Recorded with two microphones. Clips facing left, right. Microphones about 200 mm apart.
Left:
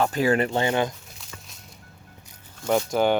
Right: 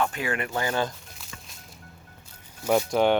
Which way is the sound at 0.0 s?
35° left (ahead or behind).